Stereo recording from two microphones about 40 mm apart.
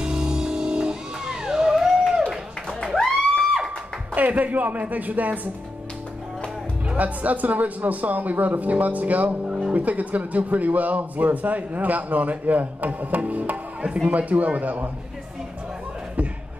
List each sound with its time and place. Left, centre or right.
0.0 s music: right
1.8 s a sound: centre
2.8 s music: centre
4.1 s a woman's voice: right
7.0 s speech: right
9.5 s music: right
9.8 s speech: right